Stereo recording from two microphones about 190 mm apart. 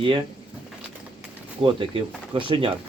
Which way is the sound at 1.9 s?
25° right (ahead or behind).